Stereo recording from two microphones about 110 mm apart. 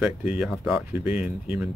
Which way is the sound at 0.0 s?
10° right (ahead or behind).